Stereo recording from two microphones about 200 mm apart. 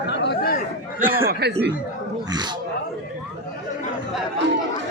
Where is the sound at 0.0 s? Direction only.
60° left (ahead or behind).